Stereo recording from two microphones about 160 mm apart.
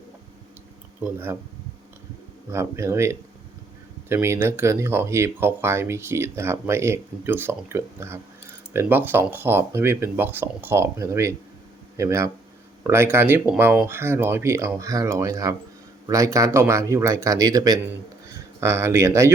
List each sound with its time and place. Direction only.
1.0 s speech: 15° right (ahead or behind)
2.5 s speech: 15° right (ahead or behind)